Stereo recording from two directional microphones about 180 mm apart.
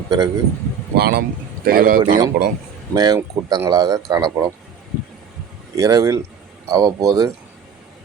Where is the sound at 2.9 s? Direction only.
20° right (ahead or behind).